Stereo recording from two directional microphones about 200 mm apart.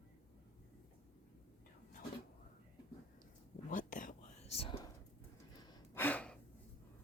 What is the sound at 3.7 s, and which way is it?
Whispering, 40° left (ahead or behind).